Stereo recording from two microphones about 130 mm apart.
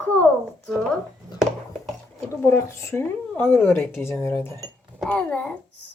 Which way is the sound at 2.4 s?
20° left (ahead or behind).